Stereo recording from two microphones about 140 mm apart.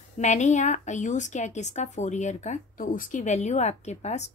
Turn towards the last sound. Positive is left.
turn(degrees=55)  # may be behind; listen again after turning